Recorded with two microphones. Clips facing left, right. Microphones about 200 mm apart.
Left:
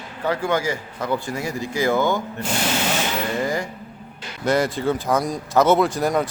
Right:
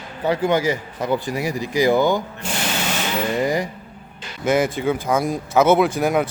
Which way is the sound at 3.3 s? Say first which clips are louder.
Right 4 dB; 20° right (ahead or behind).